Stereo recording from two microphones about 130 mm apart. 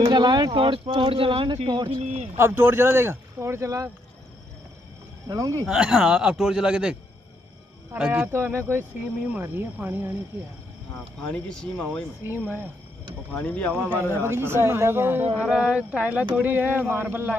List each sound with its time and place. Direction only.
0.0 s speech: 35° right (ahead or behind)
2.0 s speech: 55° right (ahead or behind)
2.3 s speech: 20° right (ahead or behind)
5.3 s speech: 25° right (ahead or behind)
5.7 s speech: 5° right (ahead or behind)
11.1 s speech: 5° left (ahead or behind)
12.3 s speech: 15° right (ahead or behind)
13.3 s speech: 10° left (ahead or behind)
14.2 s speech: 20° right (ahead or behind)